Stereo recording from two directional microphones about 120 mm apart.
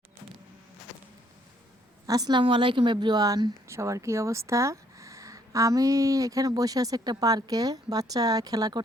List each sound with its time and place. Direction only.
2.0 s a woman's voice: 35° right (ahead or behind)